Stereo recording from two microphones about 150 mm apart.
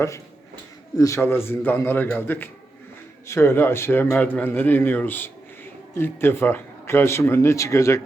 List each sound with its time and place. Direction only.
0.9 s speech: 20° left (ahead or behind)